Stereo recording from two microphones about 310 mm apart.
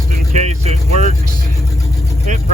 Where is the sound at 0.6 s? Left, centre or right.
Centre.